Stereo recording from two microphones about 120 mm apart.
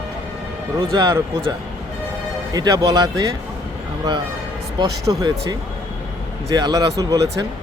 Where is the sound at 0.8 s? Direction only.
35° right (ahead or behind).